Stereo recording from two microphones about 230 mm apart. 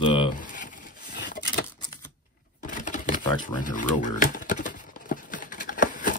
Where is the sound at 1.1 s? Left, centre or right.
Left.